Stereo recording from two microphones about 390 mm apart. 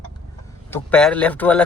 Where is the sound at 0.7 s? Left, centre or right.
Centre.